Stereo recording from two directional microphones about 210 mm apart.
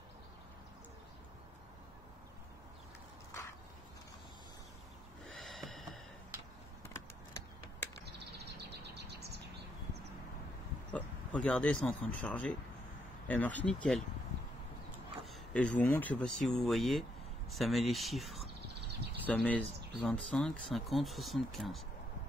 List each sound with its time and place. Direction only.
5.2 s snort: centre (ahead or behind)
6.9 s typing: 10° left (ahead or behind)
8.0 s a sound: 55° right (ahead or behind)
10.9 s speech: 5° left (ahead or behind)